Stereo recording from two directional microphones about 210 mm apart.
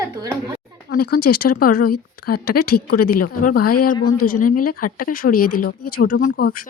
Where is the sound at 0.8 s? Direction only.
45° left (ahead or behind).